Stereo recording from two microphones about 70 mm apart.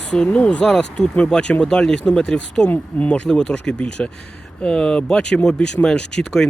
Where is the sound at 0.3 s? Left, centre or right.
Centre.